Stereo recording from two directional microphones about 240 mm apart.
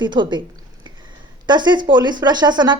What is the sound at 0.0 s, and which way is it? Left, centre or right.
Speech, centre.